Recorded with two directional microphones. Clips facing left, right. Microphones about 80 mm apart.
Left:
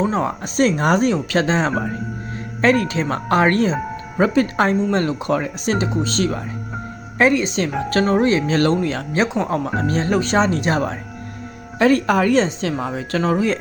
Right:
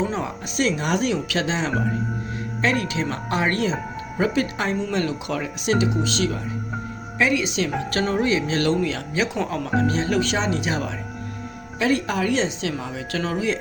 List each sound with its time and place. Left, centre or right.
0.0 s speech: left